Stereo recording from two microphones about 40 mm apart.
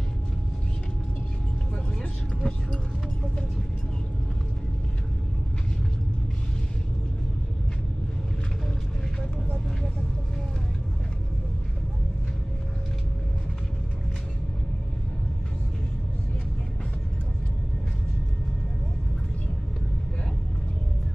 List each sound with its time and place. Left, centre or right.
2.0 s vehicle: centre